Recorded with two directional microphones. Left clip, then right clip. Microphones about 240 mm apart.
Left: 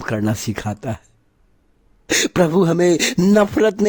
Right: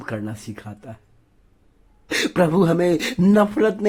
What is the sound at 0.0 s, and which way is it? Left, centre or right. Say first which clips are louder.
Speech: left 8 dB; left.